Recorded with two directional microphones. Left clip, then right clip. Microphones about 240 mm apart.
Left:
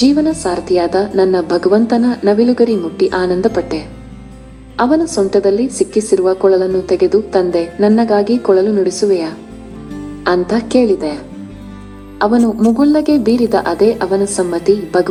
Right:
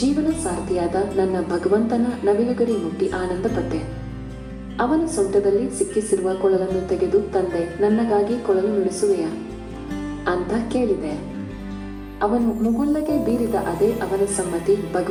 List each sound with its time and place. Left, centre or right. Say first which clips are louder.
0.0 s a woman's voice: left 9 dB; left
12.2 s a woman's voice: left 8 dB; left